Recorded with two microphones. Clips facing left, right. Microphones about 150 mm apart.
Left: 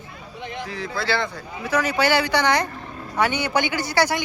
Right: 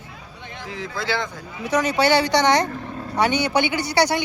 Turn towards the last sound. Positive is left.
turn(degrees=-20)  # may be behind; listen again after turning